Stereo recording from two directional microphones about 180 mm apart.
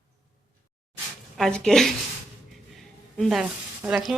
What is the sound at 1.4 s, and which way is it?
Speech, 5° left (ahead or behind).